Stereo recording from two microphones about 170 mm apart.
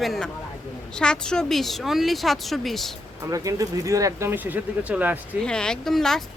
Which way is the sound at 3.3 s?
20° right (ahead or behind).